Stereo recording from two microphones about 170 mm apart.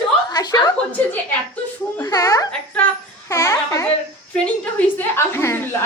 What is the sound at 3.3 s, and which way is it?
Babbling, 15° left (ahead or behind).